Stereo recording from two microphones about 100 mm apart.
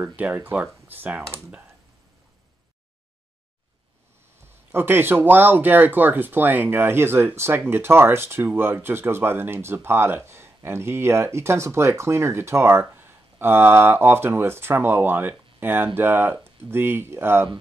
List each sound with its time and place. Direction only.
0.0 s speech: 15° right (ahead or behind)
4.7 s speech: 20° right (ahead or behind)